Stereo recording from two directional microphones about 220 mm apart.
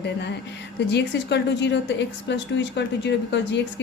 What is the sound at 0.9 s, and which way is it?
Speech, 50° left (ahead or behind).